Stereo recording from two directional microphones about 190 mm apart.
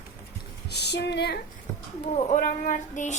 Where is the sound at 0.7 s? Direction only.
60° left (ahead or behind).